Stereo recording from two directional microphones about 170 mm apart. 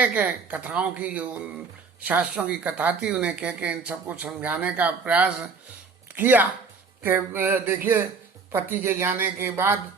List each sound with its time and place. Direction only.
0.0 s speech: 10° right (ahead or behind)